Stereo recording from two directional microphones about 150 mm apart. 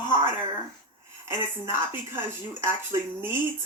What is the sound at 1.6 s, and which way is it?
Speech, 15° right (ahead or behind).